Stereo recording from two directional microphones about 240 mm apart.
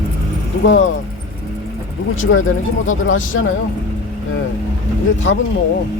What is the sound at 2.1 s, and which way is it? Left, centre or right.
Speech, left.